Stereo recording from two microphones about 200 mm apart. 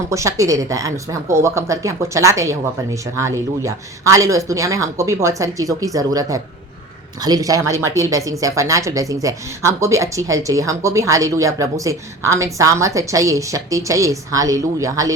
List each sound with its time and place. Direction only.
0.1 s speech: 15° right (ahead or behind)